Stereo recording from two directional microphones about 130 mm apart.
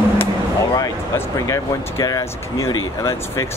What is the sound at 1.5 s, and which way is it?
Speech, 25° left (ahead or behind).